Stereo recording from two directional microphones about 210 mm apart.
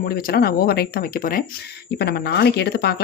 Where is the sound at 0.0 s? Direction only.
45° left (ahead or behind).